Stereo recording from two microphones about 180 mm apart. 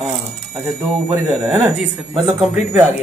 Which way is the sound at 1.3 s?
20° right (ahead or behind).